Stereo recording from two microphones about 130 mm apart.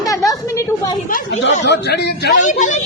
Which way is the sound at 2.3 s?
70° left (ahead or behind).